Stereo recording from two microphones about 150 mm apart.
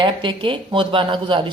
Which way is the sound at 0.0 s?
35° right (ahead or behind).